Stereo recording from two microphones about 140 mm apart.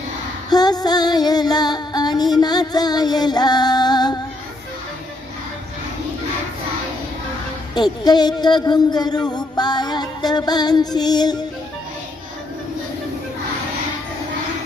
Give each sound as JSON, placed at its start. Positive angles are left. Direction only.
{"t": 0.5, "sound": "female singing", "side_deg": 30}
{"t": 7.8, "sound": "speech", "side_deg": 30}